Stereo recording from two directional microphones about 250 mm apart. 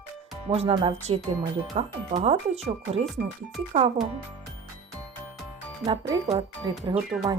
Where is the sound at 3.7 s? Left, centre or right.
Right.